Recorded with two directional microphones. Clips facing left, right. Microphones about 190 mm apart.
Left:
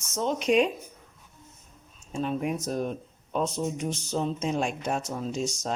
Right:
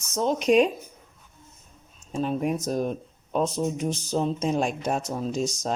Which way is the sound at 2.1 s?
35° right (ahead or behind).